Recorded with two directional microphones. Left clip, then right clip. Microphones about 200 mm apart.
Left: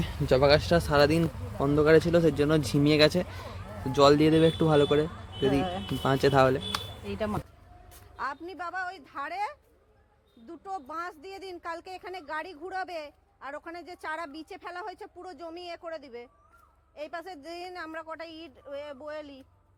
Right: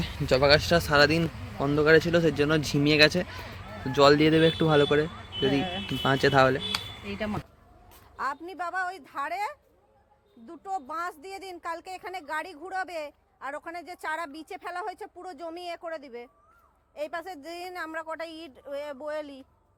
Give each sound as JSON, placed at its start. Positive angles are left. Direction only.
{"t": 0.0, "sound": "a woman's voice", "side_deg": 15}